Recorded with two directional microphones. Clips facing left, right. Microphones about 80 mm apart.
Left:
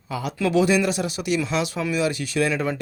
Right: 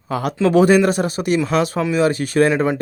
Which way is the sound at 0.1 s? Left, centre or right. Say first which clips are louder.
Right 6 dB; right.